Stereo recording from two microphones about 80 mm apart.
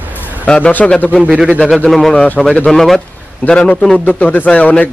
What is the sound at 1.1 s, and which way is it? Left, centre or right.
Speech, centre.